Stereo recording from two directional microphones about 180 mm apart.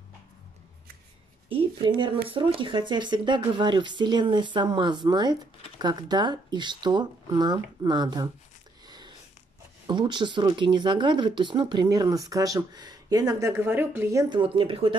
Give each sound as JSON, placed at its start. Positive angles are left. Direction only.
{"t": 1.5, "sound": "speech", "side_deg": -30}
{"t": 8.8, "sound": "a sound", "side_deg": -25}
{"t": 9.8, "sound": "speech", "side_deg": -25}
{"t": 14.3, "sound": "speech", "side_deg": -30}